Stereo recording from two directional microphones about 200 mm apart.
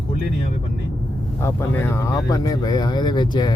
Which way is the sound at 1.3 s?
10° left (ahead or behind).